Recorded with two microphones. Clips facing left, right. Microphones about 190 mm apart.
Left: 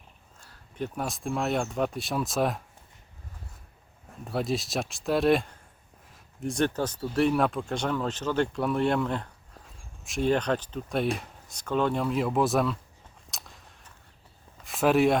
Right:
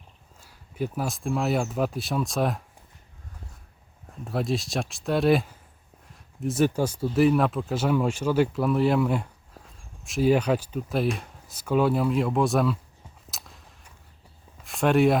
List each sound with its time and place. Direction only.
0.4 s speech: 5° right (ahead or behind)
4.2 s speech: centre (ahead or behind)
13.3 s a sound: centre (ahead or behind)